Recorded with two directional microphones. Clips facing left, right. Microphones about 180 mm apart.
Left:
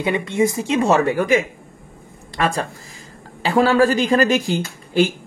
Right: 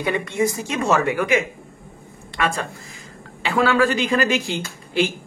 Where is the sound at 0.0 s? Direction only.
20° left (ahead or behind).